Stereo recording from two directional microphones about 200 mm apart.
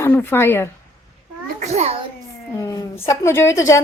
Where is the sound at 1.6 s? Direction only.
35° right (ahead or behind).